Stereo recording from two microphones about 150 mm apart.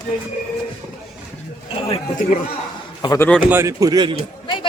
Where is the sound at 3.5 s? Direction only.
15° right (ahead or behind).